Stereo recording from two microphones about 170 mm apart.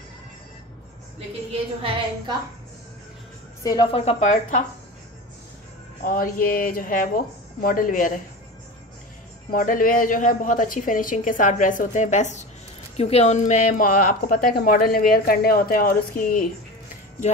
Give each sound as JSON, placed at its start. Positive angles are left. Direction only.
{"t": 3.6, "sound": "a woman's voice", "side_deg": 25}
{"t": 6.0, "sound": "a woman's voice", "side_deg": 55}
{"t": 9.5, "sound": "a woman's voice", "side_deg": 50}